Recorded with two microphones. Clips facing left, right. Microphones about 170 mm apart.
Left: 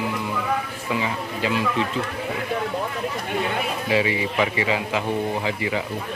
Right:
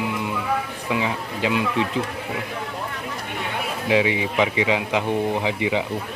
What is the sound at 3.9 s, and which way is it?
A man's voice, 15° right (ahead or behind).